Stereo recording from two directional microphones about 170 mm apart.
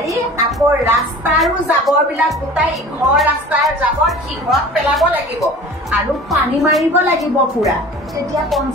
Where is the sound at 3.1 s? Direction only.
5° right (ahead or behind).